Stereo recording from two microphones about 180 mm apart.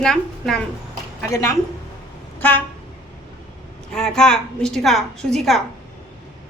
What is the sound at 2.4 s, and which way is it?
Vehicle, 10° left (ahead or behind).